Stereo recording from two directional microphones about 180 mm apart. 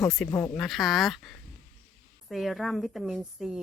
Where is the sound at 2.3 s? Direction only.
Centre (ahead or behind).